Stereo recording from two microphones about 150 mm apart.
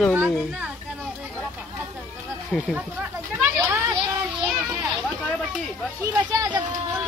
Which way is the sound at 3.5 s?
15° right (ahead or behind).